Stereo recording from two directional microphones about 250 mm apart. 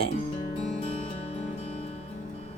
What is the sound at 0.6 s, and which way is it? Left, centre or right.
Music, left.